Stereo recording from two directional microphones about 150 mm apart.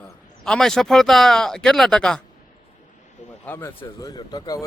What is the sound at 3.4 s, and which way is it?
Speech, 15° left (ahead or behind).